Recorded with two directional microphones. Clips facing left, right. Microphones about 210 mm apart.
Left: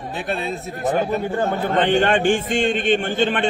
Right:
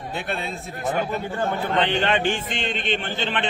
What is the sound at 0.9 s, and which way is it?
A man's voice, 40° left (ahead or behind).